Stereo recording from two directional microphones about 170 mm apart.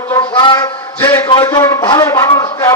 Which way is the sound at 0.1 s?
25° left (ahead or behind).